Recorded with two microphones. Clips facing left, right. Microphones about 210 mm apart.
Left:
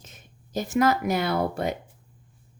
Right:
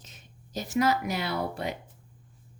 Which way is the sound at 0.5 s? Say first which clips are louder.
Left 3 dB; 50° left (ahead or behind).